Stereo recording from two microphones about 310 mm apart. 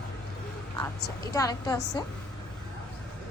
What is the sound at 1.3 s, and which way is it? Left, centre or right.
Speech, centre.